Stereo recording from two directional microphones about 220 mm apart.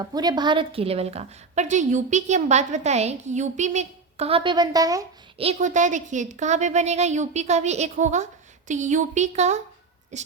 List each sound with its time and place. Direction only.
0.0 s a woman's voice: 20° right (ahead or behind)
5.4 s a woman's voice: 30° right (ahead or behind)